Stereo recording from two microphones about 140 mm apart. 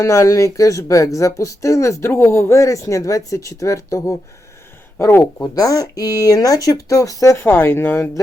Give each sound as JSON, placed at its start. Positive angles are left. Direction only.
{"t": 0.0, "sound": "speech", "side_deg": 20}